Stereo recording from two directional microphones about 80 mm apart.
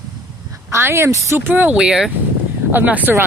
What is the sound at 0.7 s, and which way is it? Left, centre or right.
Speech, right.